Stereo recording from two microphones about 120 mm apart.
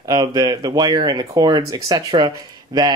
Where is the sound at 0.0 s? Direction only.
35° right (ahead or behind).